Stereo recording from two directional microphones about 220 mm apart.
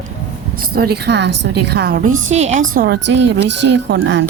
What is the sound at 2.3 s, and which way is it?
Speech, 30° right (ahead or behind).